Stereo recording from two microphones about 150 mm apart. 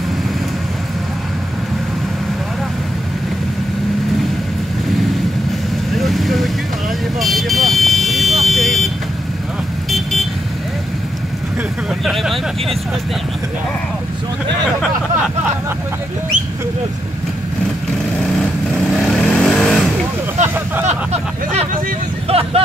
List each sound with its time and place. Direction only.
6.0 s boat: centre (ahead or behind)
7.2 s vehicle: centre (ahead or behind)
12.0 s vehicle: centre (ahead or behind)
18.9 s vehicle: centre (ahead or behind)
20.8 s vehicle: 45° right (ahead or behind)